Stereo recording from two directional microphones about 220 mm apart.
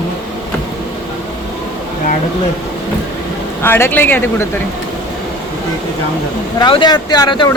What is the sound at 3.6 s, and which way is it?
Speech, 10° left (ahead or behind).